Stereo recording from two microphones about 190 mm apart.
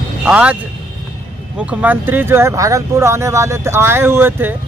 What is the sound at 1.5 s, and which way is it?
Speech, 10° right (ahead or behind).